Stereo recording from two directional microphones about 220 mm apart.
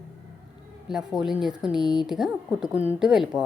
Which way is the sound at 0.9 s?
5° right (ahead or behind).